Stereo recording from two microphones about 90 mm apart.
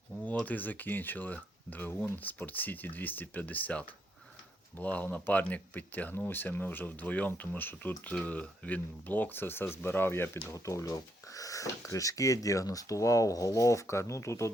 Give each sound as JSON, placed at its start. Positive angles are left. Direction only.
{"t": 0.4, "sound": "speech", "side_deg": 20}